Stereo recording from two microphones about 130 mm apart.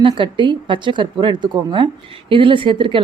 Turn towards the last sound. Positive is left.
turn(degrees=-40)  # may be behind; listen again after turning